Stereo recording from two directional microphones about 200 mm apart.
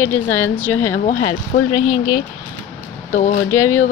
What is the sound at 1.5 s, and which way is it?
Speech, 60° left (ahead or behind).